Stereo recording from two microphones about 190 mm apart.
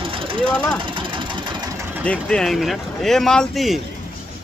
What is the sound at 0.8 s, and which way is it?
Engine, 25° right (ahead or behind).